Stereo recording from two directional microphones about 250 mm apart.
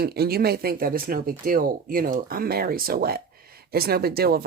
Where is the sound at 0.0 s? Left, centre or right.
Right.